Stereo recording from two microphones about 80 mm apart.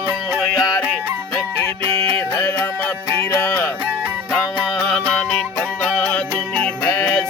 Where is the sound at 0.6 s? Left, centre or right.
Left.